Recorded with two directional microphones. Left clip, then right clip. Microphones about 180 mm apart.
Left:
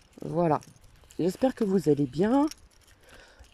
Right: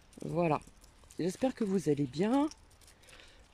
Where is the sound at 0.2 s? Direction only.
Centre (ahead or behind).